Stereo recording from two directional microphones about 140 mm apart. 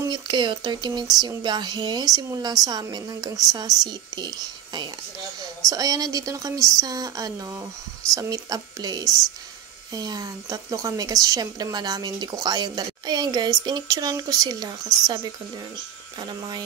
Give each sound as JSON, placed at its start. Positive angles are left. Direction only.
{"t": 0.0, "sound": "a woman's voice", "side_deg": -30}
{"t": 16.2, "sound": "a woman's voice", "side_deg": -30}